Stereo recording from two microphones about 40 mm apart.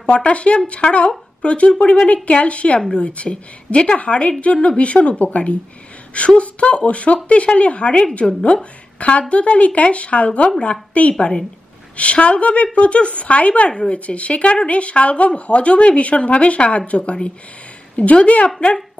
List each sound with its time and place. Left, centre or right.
0.0 s speech: left
9.3 s speech: left